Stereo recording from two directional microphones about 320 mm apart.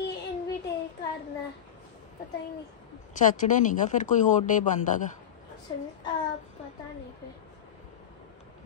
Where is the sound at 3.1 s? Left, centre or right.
Left.